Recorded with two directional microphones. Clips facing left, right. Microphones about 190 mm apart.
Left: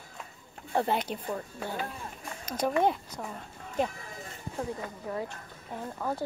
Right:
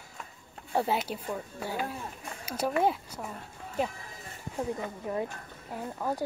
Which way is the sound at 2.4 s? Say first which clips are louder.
Left 1 dB; 5° right (ahead or behind).